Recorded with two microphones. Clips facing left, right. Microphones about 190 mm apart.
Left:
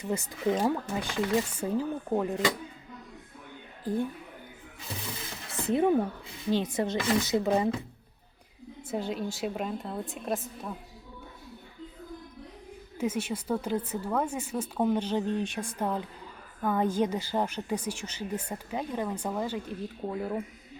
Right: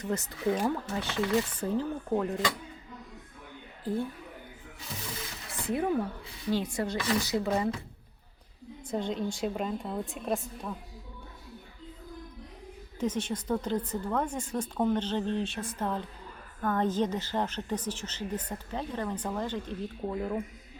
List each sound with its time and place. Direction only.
0.0 s a woman's voice: 10° left (ahead or behind)
3.9 s a woman's voice: 15° left (ahead or behind)
5.5 s a sound: 25° left (ahead or behind)
6.5 s speech: 20° left (ahead or behind)
8.9 s a woman's voice: 5° left (ahead or behind)
13.0 s a woman's voice: 10° left (ahead or behind)